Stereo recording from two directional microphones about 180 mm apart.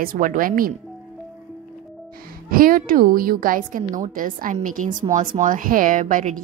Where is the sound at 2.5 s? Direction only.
50° right (ahead or behind).